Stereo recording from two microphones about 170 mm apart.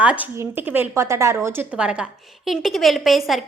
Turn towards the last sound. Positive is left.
turn(degrees=0)  # may be behind; listen again after turning